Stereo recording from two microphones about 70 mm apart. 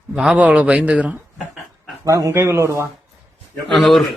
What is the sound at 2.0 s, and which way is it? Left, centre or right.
Speech, right.